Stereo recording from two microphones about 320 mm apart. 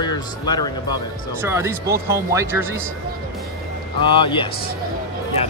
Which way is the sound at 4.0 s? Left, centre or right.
Centre.